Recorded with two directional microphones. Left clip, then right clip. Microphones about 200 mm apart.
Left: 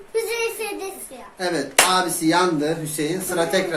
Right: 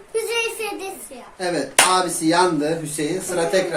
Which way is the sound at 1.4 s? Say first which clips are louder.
Right 1 dB; 10° left (ahead or behind).